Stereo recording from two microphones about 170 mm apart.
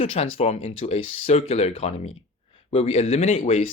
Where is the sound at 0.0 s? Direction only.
35° left (ahead or behind).